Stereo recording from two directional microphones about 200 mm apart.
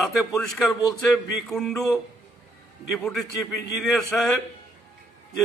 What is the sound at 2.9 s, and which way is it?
A man's voice, centre (ahead or behind).